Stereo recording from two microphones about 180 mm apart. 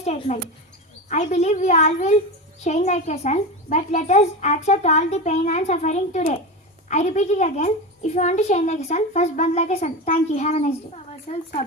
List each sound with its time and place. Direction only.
0.0 s a child's voice: 40° left (ahead or behind)